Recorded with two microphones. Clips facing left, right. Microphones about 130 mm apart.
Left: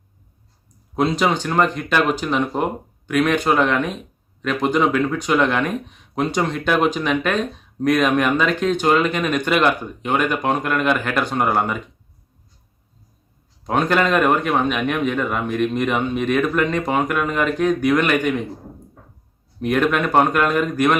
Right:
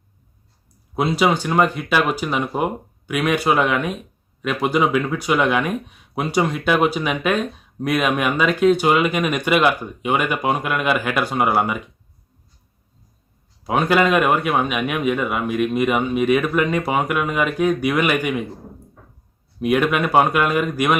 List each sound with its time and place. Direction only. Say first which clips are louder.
0.9 s speech: even; 5° right (ahead or behind)
13.7 s speech: right 1 dB; 5° right (ahead or behind)
19.5 s speech: even; 5° right (ahead or behind)